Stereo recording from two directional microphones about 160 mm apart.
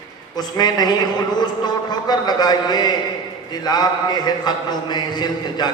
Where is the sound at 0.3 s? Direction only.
25° left (ahead or behind).